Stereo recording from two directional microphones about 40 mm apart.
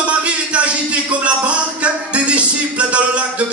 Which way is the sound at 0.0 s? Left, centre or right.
Right.